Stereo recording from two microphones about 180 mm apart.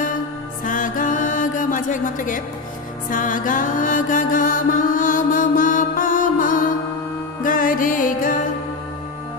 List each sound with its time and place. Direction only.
0.7 s music: 45° left (ahead or behind)